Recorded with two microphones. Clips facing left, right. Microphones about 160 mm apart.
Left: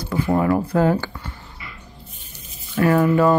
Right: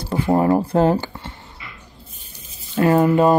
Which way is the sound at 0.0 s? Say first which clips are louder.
Right 2 dB; 30° right (ahead or behind).